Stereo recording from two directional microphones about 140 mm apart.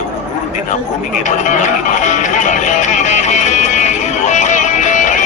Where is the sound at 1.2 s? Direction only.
60° left (ahead or behind).